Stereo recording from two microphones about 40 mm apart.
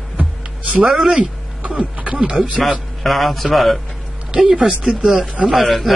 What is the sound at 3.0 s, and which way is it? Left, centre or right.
Speech, centre.